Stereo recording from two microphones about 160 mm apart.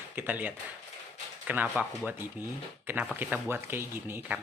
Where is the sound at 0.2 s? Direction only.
10° right (ahead or behind).